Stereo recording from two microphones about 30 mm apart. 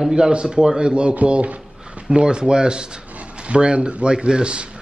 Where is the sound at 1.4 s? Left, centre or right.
Right.